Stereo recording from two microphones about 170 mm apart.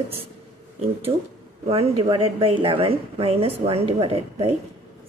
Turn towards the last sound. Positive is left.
turn(degrees=-35)  # may be behind; listen again after turning